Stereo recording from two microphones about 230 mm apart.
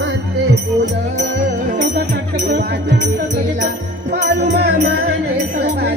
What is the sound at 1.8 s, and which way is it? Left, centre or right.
Music, right.